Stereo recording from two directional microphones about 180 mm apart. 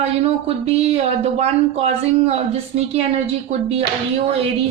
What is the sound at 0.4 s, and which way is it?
Speech, 35° right (ahead or behind).